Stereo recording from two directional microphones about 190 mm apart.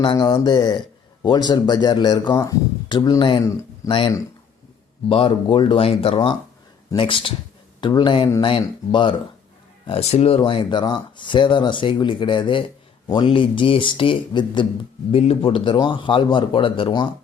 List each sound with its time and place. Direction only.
0.0 s speech: 25° left (ahead or behind)